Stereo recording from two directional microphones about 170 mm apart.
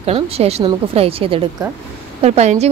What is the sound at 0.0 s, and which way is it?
A woman's voice, 35° right (ahead or behind).